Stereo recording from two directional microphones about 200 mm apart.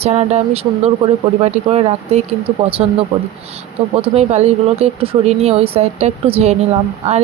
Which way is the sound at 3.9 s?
30° right (ahead or behind).